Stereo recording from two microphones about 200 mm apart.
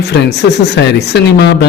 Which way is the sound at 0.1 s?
55° left (ahead or behind).